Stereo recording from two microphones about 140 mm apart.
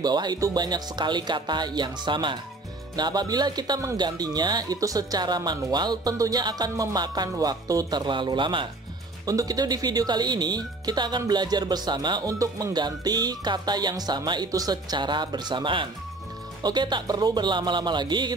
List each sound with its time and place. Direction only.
0.0 s speech: 30° right (ahead or behind)